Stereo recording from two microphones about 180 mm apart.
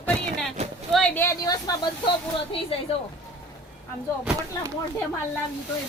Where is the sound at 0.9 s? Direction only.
10° left (ahead or behind).